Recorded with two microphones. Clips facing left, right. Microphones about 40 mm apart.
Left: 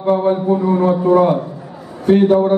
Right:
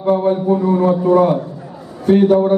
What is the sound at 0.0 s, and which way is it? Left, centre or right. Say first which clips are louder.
A man's voice: even; centre.